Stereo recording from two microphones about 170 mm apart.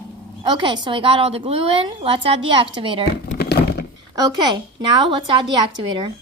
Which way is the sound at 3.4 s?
70° left (ahead or behind).